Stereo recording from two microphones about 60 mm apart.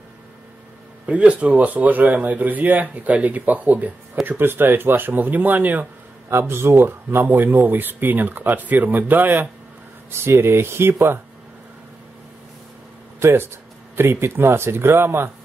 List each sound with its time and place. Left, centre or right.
1.0 s speech: centre
6.3 s speech: right
13.2 s speech: right